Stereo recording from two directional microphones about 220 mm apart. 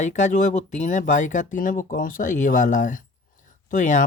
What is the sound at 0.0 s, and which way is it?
A man's voice, 35° left (ahead or behind).